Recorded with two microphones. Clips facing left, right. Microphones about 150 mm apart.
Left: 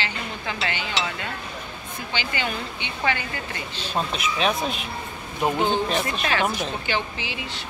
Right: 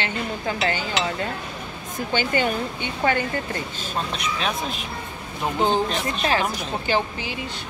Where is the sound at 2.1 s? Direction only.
45° right (ahead or behind).